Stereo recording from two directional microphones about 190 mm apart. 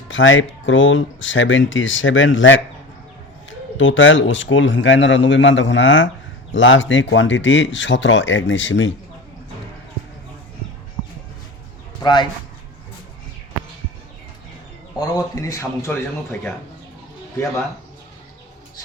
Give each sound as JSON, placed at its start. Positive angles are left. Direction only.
{"t": 0.1, "sound": "speech", "side_deg": 90}
{"t": 3.8, "sound": "speech", "side_deg": 85}
{"t": 12.0, "sound": "a man's voice", "side_deg": 20}
{"t": 14.9, "sound": "a man's voice", "side_deg": 20}